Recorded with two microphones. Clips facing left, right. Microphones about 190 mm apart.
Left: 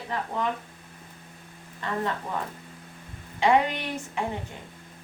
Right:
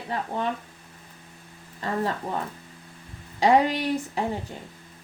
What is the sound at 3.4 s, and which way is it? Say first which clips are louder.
Speech: right 3 dB; 35° right (ahead or behind).